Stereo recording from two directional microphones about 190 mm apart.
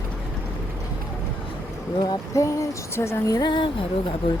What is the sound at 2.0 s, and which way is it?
Speech, 15° left (ahead or behind).